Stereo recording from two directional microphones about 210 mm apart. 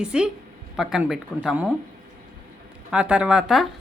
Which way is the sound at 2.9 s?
5° right (ahead or behind).